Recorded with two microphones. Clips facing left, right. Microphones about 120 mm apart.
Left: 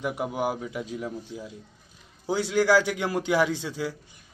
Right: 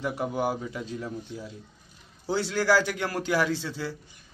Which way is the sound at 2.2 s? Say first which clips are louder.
Left 2 dB; 15° left (ahead or behind).